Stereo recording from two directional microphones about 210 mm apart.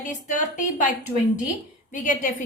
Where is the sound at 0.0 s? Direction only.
35° left (ahead or behind).